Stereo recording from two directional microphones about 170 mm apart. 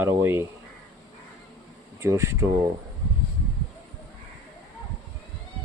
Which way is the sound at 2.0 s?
15° right (ahead or behind).